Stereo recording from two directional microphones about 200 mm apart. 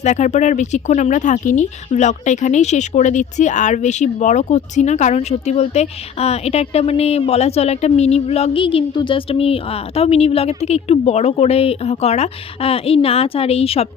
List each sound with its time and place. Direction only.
0.0 s speech: 35° left (ahead or behind)